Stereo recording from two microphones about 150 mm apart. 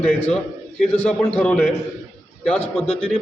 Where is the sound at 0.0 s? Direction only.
5° left (ahead or behind).